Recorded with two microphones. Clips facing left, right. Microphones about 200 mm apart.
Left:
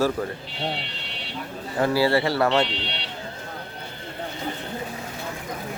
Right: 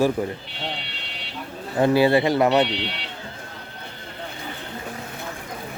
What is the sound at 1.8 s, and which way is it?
Speech, 20° right (ahead or behind).